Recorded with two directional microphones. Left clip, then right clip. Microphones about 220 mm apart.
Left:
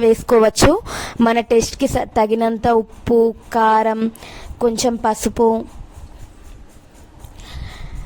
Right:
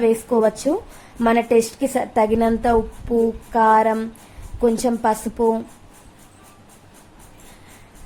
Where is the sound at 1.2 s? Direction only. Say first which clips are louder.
Left 1 dB; 40° left (ahead or behind).